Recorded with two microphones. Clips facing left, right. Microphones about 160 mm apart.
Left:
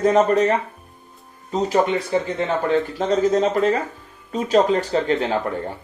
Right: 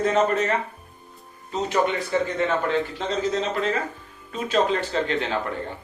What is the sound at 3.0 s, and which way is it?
Speech, 45° left (ahead or behind).